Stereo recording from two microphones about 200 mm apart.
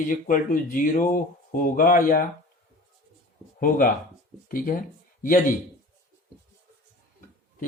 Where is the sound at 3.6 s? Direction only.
45° left (ahead or behind).